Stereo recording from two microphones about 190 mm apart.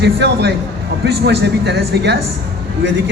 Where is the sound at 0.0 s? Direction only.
60° right (ahead or behind).